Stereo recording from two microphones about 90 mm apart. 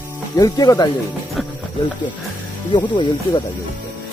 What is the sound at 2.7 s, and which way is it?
Speech, 60° left (ahead or behind).